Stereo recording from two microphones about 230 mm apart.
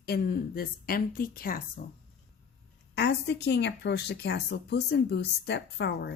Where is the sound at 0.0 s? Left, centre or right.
Left.